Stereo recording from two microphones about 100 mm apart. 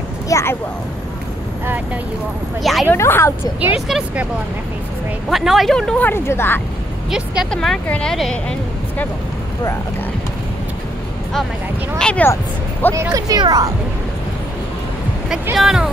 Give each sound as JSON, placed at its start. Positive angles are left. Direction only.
{"t": 0.3, "sound": "speech", "side_deg": 25}
{"t": 2.6, "sound": "speech", "side_deg": 0}
{"t": 2.9, "sound": "speech", "side_deg": 25}
{"t": 3.7, "sound": "speech", "side_deg": -10}
{"t": 5.3, "sound": "speech", "side_deg": 0}
{"t": 5.9, "sound": "speech", "side_deg": 20}
{"t": 7.1, "sound": "speech", "side_deg": -10}
{"t": 7.5, "sound": "a woman's voice", "side_deg": 5}
{"t": 12.0, "sound": "speech", "side_deg": 10}
{"t": 13.1, "sound": "speech", "side_deg": -40}
{"t": 15.5, "sound": "speech", "side_deg": -5}